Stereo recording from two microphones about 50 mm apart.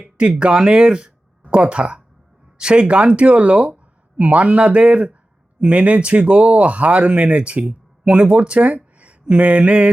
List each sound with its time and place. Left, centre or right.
0.2 s speech: right